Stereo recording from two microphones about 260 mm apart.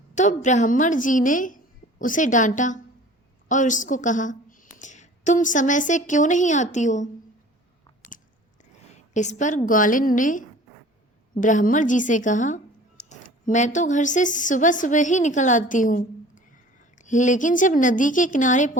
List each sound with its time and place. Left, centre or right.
0.2 s a woman's voice: left
8.9 s a woman's voice: left